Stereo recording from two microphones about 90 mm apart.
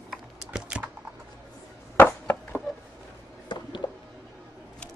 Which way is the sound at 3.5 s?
55° left (ahead or behind).